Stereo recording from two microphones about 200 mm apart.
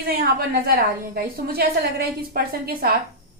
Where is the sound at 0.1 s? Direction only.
50° right (ahead or behind).